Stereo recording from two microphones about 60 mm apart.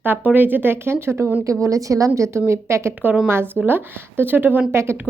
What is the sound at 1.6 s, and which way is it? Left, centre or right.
Speech, right.